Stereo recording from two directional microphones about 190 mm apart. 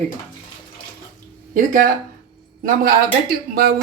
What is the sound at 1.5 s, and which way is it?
Speech, 45° right (ahead or behind).